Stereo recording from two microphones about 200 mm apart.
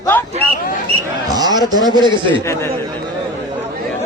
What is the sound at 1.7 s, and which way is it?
Speech, 20° right (ahead or behind).